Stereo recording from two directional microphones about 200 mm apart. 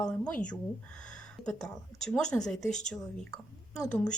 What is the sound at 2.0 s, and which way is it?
Speech, 5° left (ahead or behind).